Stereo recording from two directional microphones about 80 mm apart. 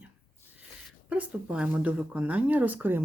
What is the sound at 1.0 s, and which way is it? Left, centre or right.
Speech, centre.